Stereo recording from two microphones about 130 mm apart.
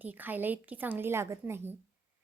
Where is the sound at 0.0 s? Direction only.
15° right (ahead or behind).